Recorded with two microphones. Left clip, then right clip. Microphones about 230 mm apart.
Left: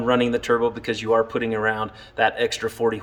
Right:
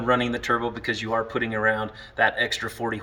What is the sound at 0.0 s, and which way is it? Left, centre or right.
Speech, centre.